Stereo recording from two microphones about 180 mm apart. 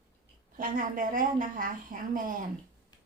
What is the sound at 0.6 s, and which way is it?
A woman's voice, 50° right (ahead or behind).